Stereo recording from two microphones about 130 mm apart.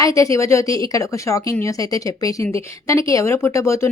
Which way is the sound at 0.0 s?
25° left (ahead or behind).